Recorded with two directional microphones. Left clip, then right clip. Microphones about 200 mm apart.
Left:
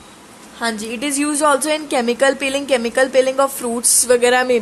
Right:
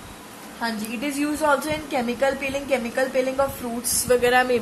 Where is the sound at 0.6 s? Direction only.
55° left (ahead or behind).